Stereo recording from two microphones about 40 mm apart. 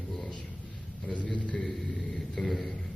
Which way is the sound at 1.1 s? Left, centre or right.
Left.